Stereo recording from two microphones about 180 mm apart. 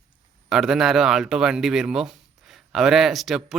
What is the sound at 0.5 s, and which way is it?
A man's voice, 5° right (ahead or behind).